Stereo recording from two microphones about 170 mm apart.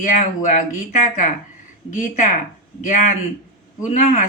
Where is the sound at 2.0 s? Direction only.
50° left (ahead or behind).